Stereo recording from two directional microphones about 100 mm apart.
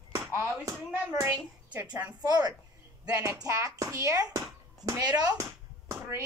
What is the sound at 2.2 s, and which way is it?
Speech, 40° right (ahead or behind).